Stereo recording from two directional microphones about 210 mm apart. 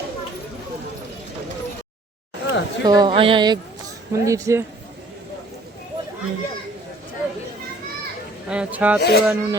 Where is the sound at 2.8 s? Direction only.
20° right (ahead or behind).